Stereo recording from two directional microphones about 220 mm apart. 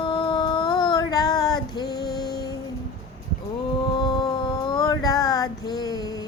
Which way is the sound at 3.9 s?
20° left (ahead or behind).